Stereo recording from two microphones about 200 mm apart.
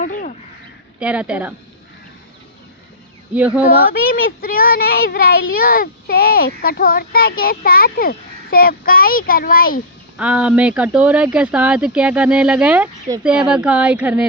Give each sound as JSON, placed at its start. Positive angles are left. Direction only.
{"t": 0.0, "sound": "a sound", "side_deg": 40}
{"t": 0.9, "sound": "speech", "side_deg": -5}
{"t": 3.3, "sound": "speech", "side_deg": -5}
{"t": 4.1, "sound": "speech", "side_deg": 45}
{"t": 10.2, "sound": "speech", "side_deg": -5}